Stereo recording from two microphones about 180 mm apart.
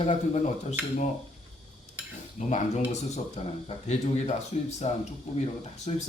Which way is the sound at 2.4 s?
40° left (ahead or behind).